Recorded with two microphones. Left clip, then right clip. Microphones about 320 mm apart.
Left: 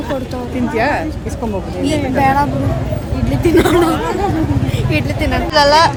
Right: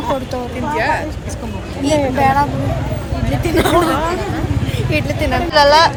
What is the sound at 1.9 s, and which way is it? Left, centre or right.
Speech, centre.